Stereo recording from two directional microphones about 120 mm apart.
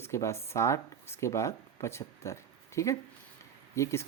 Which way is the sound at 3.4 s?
25° left (ahead or behind).